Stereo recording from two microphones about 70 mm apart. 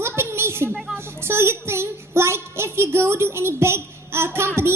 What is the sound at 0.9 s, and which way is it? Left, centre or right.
Child singing, right.